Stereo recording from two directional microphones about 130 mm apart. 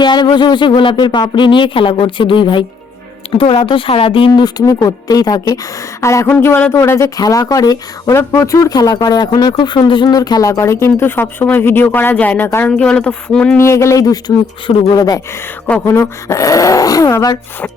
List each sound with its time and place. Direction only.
0.0 s speech: 35° left (ahead or behind)
4.3 s speech: 30° left (ahead or behind); by 12.5 s 10° left (ahead or behind)
12.5 s a sound: 20° left (ahead or behind)
12.7 s a sound: 5° left (ahead or behind)
13.6 s speech: 20° left (ahead or behind)
15.6 s speech: 15° left (ahead or behind)